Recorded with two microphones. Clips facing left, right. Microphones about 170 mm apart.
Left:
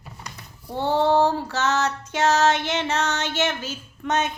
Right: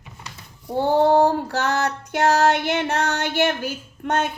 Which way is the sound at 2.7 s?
60° right (ahead or behind).